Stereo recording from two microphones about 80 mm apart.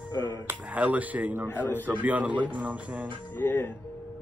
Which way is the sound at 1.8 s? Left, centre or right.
Right.